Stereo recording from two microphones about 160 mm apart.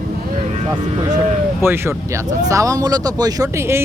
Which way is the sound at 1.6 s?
15° right (ahead or behind).